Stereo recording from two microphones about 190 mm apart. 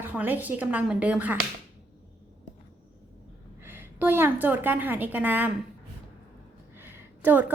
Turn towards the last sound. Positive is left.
turn(degrees=-10)  # may be behind; listen again after turning